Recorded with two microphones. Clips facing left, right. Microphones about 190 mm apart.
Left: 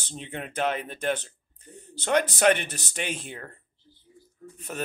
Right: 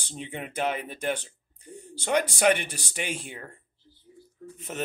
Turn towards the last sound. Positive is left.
turn(degrees=-20)  # may be behind; listen again after turning